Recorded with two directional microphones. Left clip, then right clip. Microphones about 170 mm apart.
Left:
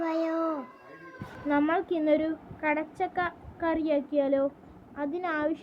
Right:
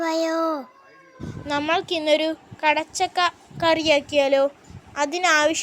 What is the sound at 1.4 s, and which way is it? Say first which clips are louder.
A woman's voice: right 4 dB; 40° right (ahead or behind).